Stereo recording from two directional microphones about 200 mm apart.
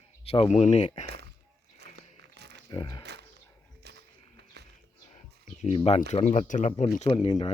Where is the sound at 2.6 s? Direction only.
20° left (ahead or behind).